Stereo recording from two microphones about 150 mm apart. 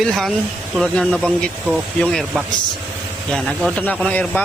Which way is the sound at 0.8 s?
5° left (ahead or behind).